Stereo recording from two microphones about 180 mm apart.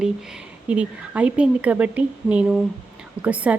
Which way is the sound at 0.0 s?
5° right (ahead or behind).